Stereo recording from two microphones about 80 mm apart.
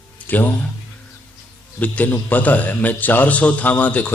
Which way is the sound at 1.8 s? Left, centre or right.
Left.